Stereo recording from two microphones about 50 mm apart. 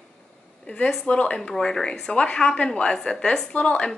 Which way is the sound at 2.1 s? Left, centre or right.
Left.